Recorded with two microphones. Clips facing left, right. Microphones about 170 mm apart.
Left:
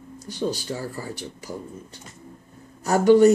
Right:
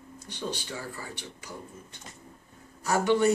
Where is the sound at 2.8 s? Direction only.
40° left (ahead or behind).